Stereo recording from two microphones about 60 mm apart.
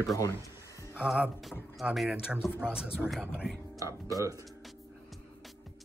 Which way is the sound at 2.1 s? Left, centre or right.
Centre.